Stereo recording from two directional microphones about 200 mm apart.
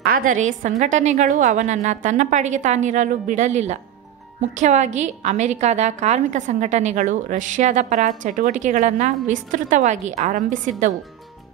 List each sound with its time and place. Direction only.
0.0 s a woman's voice: 45° right (ahead or behind)